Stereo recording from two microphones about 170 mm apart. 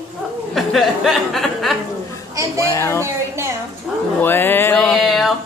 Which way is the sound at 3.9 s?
Centre (ahead or behind).